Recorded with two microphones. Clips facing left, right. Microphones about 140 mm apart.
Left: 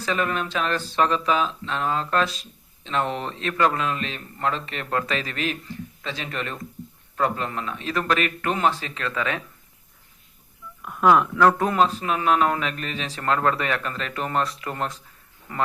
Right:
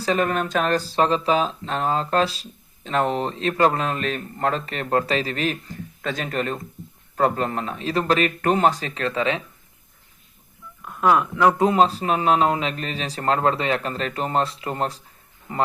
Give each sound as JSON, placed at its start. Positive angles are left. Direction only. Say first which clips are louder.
{"t": 0.0, "sound": "speech", "louder": "right 4 dB", "side_deg": -40}
{"t": 10.8, "sound": "speech", "louder": "left 1 dB", "side_deg": 0}
{"t": 11.3, "sound": "speech", "louder": "right 1 dB", "side_deg": -20}
{"t": 11.8, "sound": "speech", "louder": "right 3 dB", "side_deg": -35}